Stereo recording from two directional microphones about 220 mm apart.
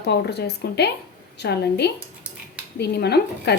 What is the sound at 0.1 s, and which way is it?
Speech, 50° left (ahead or behind).